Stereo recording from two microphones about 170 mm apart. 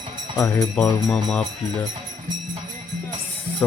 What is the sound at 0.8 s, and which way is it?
Music, 5° left (ahead or behind).